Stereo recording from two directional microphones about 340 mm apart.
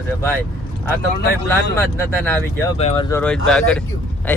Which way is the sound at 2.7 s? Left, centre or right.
Centre.